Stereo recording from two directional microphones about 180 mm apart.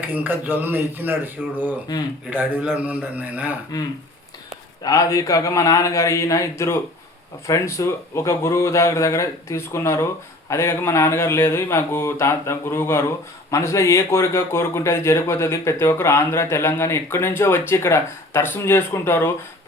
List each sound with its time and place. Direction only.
0.0 s speech: 10° right (ahead or behind)
3.7 s speech: 20° left (ahead or behind)